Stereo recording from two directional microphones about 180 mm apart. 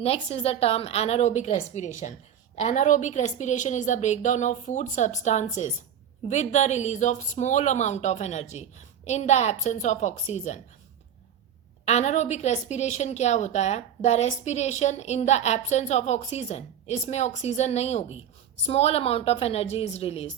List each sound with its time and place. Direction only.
0.0 s a woman's voice: 35° left (ahead or behind)
11.9 s a woman's voice: 40° left (ahead or behind)